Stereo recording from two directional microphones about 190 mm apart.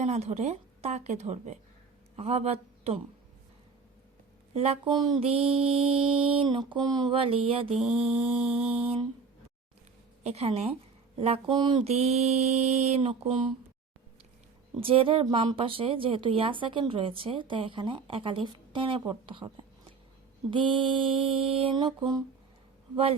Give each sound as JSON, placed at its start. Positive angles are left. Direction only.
{"t": 0.0, "sound": "a woman's voice", "side_deg": -35}
{"t": 4.5, "sound": "speech", "side_deg": -30}
{"t": 7.7, "sound": "mantra", "side_deg": -5}
{"t": 8.6, "sound": "a woman's voice", "side_deg": -30}
{"t": 10.2, "sound": "a woman's voice", "side_deg": -35}
{"t": 14.8, "sound": "speech", "side_deg": -30}
{"t": 20.5, "sound": "speech", "side_deg": -25}